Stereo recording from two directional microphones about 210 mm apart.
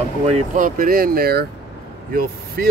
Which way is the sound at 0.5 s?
40° right (ahead or behind).